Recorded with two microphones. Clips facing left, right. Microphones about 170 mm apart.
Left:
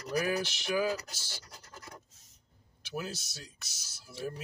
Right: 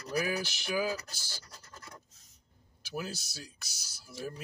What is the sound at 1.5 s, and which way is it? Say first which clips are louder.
Scratch: left 1 dB; 20° left (ahead or behind).